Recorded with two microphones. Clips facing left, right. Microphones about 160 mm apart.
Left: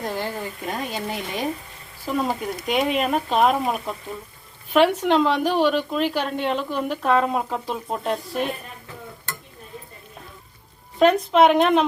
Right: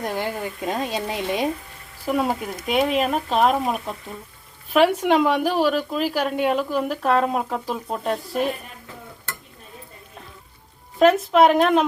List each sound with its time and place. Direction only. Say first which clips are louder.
0.0 s a woman's voice: right 2 dB; 15° right (ahead or behind)
11.0 s a woman's voice: right 1 dB; centre (ahead or behind)